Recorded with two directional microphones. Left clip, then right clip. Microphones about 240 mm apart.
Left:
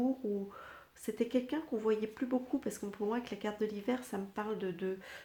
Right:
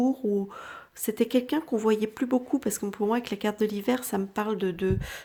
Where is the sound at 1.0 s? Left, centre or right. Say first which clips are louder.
Right 9 dB; right.